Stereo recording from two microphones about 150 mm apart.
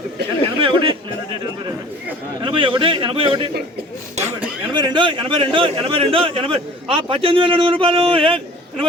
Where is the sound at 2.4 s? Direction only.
35° right (ahead or behind).